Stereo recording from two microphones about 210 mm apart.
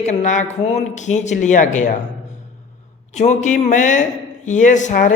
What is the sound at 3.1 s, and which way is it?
A man's voice, 35° left (ahead or behind).